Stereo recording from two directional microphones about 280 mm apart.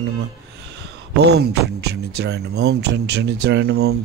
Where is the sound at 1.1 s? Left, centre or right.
Right.